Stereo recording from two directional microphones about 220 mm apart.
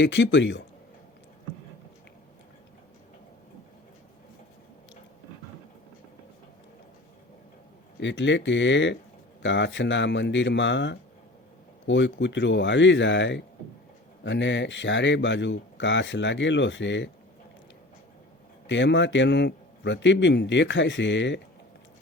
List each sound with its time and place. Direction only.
0.0 s speech: 55° left (ahead or behind)
7.9 s speech: 55° left (ahead or behind)
18.7 s speech: 55° left (ahead or behind)